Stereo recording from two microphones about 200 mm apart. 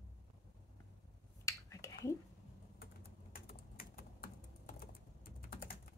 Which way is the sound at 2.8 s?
50° left (ahead or behind).